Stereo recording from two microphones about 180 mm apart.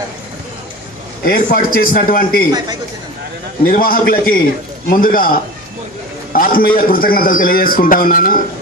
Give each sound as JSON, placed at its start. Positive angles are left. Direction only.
{"t": 1.2, "sound": "a man's voice", "side_deg": 55}
{"t": 3.6, "sound": "a man's voice", "side_deg": 55}